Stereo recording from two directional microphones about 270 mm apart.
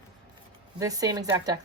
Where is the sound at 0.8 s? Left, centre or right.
Centre.